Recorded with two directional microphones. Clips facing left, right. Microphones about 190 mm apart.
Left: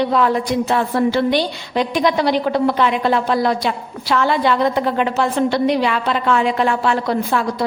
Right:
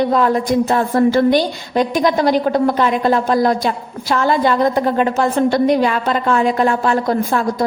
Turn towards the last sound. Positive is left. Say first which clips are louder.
# right 2 dB
turn(degrees=-45)  # may be behind; listen again after turning